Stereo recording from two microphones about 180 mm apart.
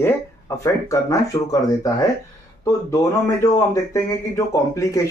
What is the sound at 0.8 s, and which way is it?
A man's voice, 20° left (ahead or behind).